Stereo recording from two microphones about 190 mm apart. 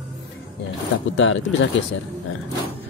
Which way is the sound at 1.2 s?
85° left.